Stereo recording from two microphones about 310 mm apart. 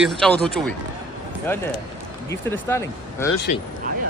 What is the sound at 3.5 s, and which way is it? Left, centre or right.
Speech, left.